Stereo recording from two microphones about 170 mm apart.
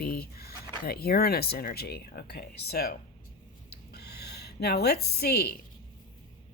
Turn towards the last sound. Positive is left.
turn(degrees=70)  # may be behind; listen again after turning